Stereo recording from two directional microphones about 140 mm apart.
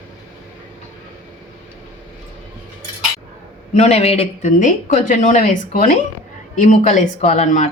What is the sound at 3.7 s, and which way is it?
Speech, 50° left (ahead or behind).